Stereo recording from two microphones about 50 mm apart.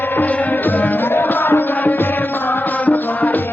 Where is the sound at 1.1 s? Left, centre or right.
Left.